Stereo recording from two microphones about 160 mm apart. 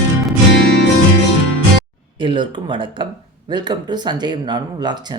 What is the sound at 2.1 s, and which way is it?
Speech, 30° right (ahead or behind).